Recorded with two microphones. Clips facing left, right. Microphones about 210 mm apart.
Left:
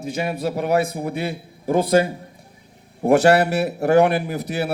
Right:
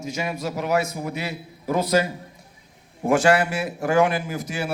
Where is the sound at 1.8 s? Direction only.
55° left (ahead or behind).